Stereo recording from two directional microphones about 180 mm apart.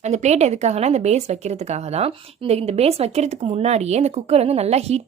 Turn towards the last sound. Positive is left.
turn(degrees=-35)  # may be behind; listen again after turning